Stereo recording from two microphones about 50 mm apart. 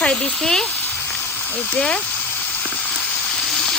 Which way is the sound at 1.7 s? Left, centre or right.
Left.